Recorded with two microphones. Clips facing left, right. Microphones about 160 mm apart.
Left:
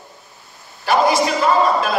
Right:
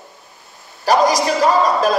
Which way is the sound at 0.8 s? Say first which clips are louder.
Right 1 dB; 40° right (ahead or behind).